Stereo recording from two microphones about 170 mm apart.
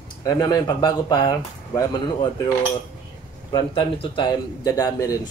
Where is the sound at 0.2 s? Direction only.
20° left (ahead or behind).